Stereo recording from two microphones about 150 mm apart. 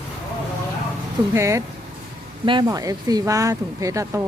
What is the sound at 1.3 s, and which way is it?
Speech, 20° right (ahead or behind).